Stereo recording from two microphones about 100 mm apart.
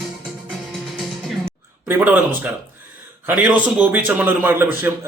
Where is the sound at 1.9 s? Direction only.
20° right (ahead or behind).